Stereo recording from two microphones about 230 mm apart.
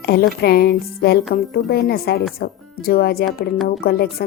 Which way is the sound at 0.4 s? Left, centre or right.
Left.